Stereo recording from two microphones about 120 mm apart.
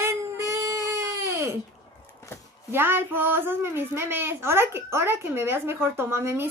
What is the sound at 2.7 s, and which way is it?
A woman's voice, 20° right (ahead or behind).